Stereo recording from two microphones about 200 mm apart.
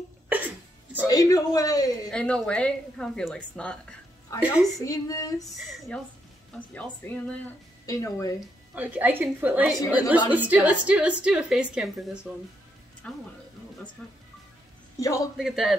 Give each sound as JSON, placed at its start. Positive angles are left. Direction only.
{"t": 1.0, "sound": "speech", "side_deg": 15}
{"t": 2.0, "sound": "a woman's voice", "side_deg": 5}
{"t": 4.7, "sound": "speech", "side_deg": 15}
{"t": 6.7, "sound": "speech", "side_deg": 5}
{"t": 8.7, "sound": "a woman's voice", "side_deg": -10}
{"t": 15.0, "sound": "speech", "side_deg": 15}
{"t": 15.3, "sound": "a woman's voice", "side_deg": 0}